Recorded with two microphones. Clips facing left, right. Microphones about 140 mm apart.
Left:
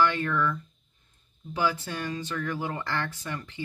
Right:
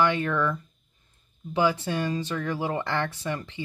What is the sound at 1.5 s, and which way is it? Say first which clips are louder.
Speech: right 5 dB; 25° right (ahead or behind).